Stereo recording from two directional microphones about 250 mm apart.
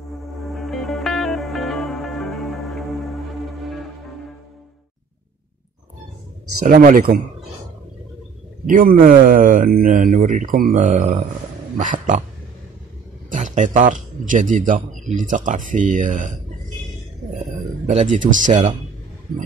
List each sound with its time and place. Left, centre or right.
0.5 s music: centre
6.6 s a man's voice: right
8.6 s a man's voice: right
13.3 s a man's voice: right
17.8 s a man's voice: right